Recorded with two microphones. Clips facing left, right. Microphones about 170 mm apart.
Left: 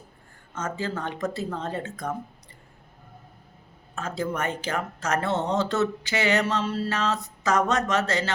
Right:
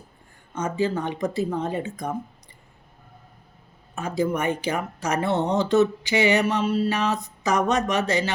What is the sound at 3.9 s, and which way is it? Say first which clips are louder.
Speech: right 5 dB; 10° right (ahead or behind).